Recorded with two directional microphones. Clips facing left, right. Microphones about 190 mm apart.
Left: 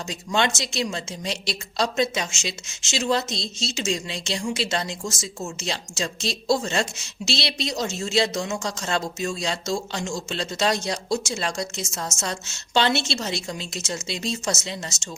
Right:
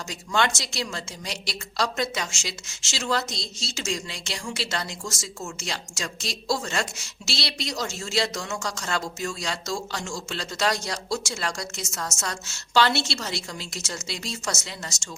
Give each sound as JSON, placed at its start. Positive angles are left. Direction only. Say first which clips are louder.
{"t": 0.1, "sound": "a woman's voice", "louder": "left 1 dB", "side_deg": 20}